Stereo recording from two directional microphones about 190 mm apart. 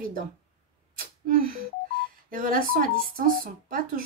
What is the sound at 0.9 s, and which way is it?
Sneeze, 50° right (ahead or behind).